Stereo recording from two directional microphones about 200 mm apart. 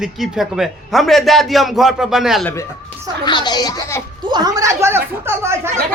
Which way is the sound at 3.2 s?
20° left (ahead or behind).